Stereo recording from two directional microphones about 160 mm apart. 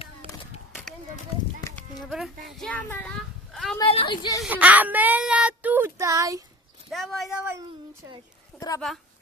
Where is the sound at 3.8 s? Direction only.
30° left (ahead or behind).